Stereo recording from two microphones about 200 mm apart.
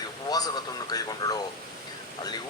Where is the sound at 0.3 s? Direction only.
20° left (ahead or behind).